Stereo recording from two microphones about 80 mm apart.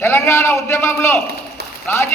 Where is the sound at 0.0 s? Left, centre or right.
Left.